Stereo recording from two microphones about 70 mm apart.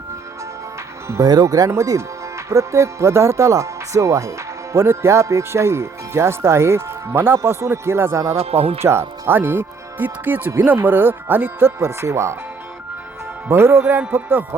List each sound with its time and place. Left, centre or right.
1.0 s speech: right
1.3 s speech: right
11.8 s speech: right
13.5 s speech: right